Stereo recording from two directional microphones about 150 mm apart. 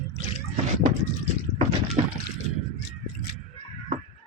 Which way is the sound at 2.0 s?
45° right (ahead or behind).